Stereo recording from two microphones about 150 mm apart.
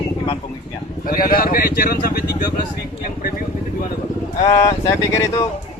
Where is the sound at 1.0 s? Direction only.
75° left (ahead or behind).